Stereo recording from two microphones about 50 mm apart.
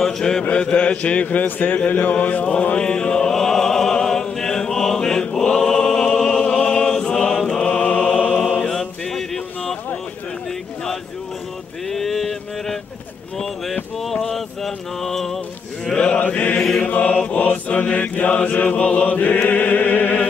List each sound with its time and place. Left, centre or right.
0.0 s mantra: centre
0.5 s a man's voice: left
1.9 s a sound: left
2.5 s a man's voice: left
2.8 s music: centre
6.5 s chant: centre
8.5 s mantra: centre
11.9 s mantra: centre
14.3 s mantra: centre
16.2 s mantra: left
17.2 s chant: left